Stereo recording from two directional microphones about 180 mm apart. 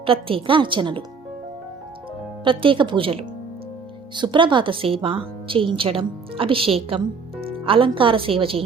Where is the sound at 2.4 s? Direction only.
30° right (ahead or behind).